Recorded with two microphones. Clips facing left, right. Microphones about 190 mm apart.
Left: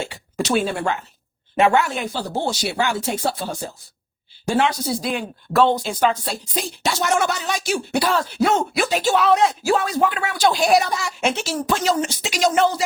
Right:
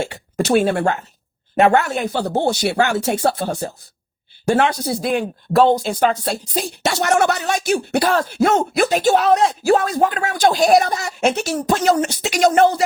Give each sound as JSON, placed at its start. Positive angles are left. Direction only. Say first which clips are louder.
{"t": 0.3, "sound": "speech", "louder": "right 5 dB", "side_deg": -55}
{"t": 1.5, "sound": "speech", "louder": "right 3 dB", "side_deg": -45}
{"t": 2.1, "sound": "speech", "louder": "right 7 dB", "side_deg": -60}
{"t": 6.8, "sound": "speech", "louder": "right 4 dB", "side_deg": -70}